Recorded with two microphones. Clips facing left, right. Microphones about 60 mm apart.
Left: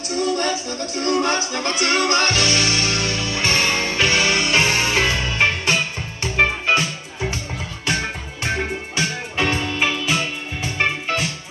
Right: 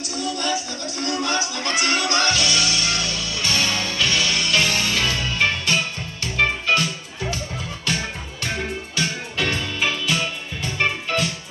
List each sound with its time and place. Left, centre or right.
0.1 s music: left
8.9 s music: left